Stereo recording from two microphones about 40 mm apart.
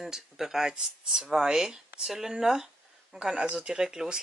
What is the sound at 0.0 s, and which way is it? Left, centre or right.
Speech, centre.